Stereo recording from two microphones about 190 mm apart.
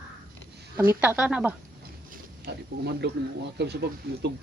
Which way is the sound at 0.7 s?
10° right (ahead or behind).